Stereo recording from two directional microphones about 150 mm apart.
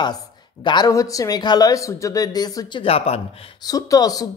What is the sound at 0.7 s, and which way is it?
Speech, 25° left (ahead or behind).